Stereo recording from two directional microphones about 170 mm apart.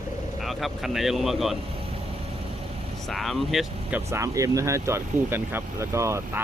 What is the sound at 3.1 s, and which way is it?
Speech, centre (ahead or behind).